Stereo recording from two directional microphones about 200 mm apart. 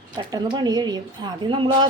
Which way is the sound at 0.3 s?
20° right (ahead or behind).